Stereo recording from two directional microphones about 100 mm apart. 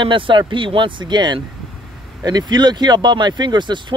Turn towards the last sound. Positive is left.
turn(degrees=-50)  # may be behind; listen again after turning